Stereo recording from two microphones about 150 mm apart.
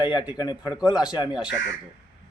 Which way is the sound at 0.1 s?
30° left (ahead or behind).